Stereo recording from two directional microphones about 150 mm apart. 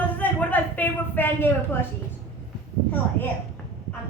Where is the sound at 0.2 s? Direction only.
10° left (ahead or behind).